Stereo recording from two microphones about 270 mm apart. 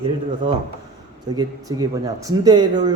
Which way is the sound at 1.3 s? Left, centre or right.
Centre.